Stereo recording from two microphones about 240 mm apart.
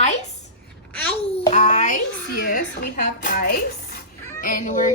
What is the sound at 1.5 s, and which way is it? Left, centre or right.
Speech, left.